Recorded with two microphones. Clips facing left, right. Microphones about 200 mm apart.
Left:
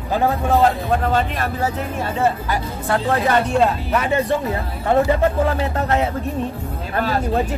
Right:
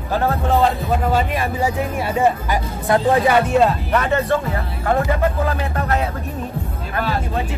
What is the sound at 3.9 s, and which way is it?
Speech, 10° left (ahead or behind).